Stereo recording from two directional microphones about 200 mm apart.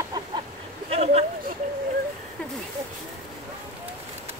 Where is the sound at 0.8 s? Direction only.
30° right (ahead or behind).